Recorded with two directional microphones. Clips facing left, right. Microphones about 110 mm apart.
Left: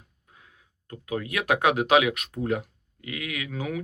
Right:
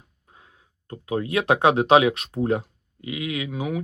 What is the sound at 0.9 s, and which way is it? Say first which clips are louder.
Speech: right 5 dB; 30° right (ahead or behind).